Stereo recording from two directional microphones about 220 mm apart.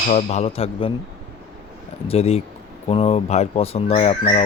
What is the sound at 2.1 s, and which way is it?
Speech, 30° left (ahead or behind).